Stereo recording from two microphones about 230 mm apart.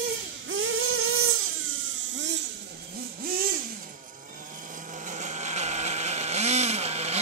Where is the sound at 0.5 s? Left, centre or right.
Right.